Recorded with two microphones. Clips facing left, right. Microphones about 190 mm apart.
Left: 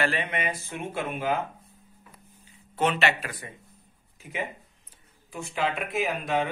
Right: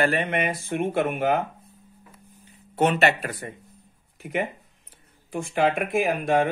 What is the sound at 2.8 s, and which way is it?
Speech, 50° right (ahead or behind).